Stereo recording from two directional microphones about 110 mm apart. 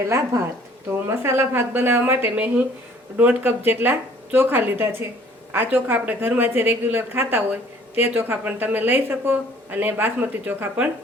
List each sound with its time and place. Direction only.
1.0 s speech: 25° right (ahead or behind)